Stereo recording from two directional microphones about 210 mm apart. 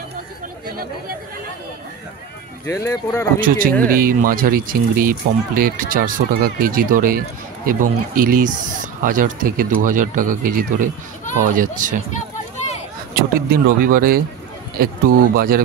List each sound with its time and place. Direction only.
2.6 s speech: 15° left (ahead or behind)
3.3 s speech: 40° right (ahead or behind)
13.1 s speech: 45° right (ahead or behind)